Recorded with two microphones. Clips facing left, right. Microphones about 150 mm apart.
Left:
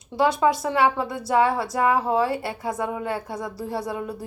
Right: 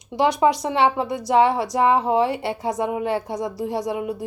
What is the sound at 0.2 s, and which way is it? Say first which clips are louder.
A woman's voice: right 2 dB; 20° right (ahead or behind).